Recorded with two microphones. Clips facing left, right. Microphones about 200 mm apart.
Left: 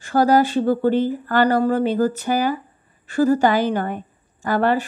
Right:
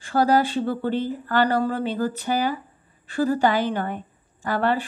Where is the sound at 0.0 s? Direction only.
45° left (ahead or behind).